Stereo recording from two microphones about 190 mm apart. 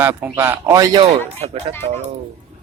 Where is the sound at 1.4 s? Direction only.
35° right (ahead or behind).